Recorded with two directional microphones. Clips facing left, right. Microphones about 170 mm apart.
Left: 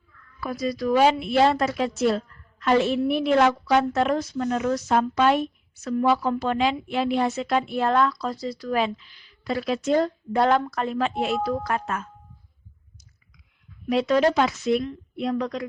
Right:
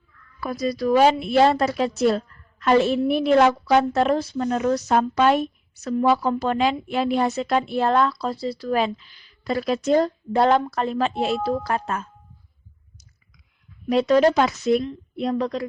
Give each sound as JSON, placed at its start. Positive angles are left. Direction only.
{"t": 0.4, "sound": "speech", "side_deg": -40}
{"t": 13.8, "sound": "speech", "side_deg": -35}